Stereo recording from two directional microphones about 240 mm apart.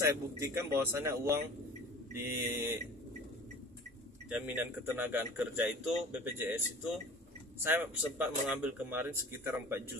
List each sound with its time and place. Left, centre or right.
0.0 s speech: centre
4.3 s speech: centre
7.6 s speech: centre